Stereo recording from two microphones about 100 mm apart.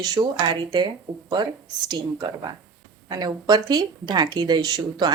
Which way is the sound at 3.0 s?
45° right (ahead or behind).